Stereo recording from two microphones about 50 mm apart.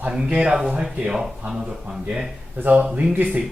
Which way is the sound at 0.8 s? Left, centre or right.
Centre.